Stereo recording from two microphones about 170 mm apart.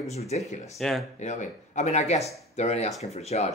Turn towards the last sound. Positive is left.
turn(degrees=40)  # may be behind; listen again after turning